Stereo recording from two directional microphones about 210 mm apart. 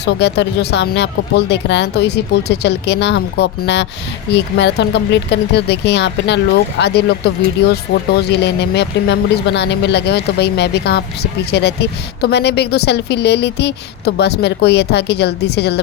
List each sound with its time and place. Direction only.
0.0 s speech: 55° left (ahead or behind)